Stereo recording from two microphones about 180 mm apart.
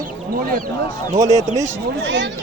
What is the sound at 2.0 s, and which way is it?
Speech, 80° right.